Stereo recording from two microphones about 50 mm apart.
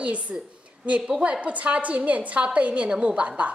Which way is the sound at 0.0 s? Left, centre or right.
Right.